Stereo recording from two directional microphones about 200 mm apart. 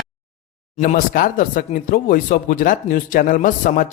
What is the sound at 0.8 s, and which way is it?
A man's voice, 45° left (ahead or behind).